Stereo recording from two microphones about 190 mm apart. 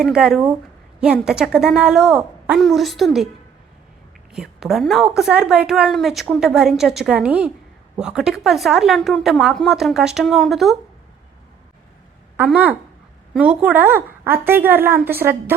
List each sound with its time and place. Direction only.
0.0 s a woman's voice: centre (ahead or behind)
4.3 s a woman's voice: centre (ahead or behind)
12.4 s a woman's voice: 5° right (ahead or behind)